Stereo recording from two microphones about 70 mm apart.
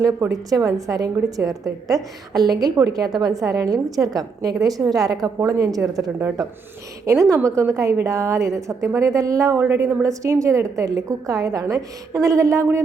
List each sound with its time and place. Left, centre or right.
0.0 s a woman's voice: right
7.0 s a woman's voice: right
9.6 s a woman's voice: right